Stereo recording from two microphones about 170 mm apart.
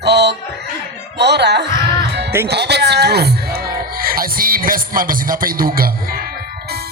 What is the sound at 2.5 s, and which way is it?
Speech, 80° right.